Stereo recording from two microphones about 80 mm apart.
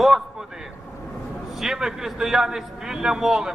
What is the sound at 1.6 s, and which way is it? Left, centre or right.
A man's voice, centre.